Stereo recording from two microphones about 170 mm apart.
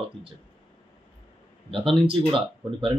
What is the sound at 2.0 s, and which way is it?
Speech, 30° right (ahead or behind).